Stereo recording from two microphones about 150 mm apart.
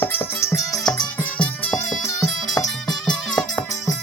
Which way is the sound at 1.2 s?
10° left (ahead or behind).